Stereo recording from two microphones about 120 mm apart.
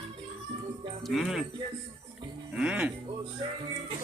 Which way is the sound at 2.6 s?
5° right (ahead or behind).